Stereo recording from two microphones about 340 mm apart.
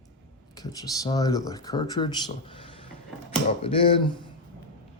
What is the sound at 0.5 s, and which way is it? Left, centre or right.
Speech, centre.